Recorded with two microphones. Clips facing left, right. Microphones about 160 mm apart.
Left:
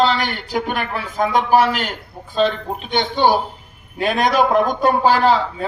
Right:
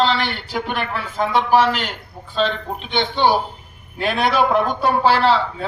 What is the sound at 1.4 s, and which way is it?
A man's voice, 10° left (ahead or behind).